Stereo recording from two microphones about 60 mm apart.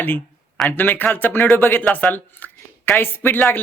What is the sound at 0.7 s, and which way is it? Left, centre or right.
A man's voice, left.